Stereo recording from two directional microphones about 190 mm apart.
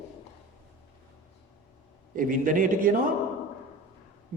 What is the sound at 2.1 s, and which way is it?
Mantra, 45° right (ahead or behind).